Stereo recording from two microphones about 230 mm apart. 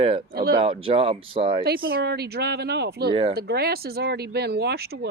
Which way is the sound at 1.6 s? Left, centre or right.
Right.